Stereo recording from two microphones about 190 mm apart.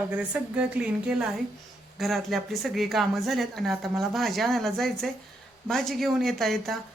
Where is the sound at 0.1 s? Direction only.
5° right (ahead or behind).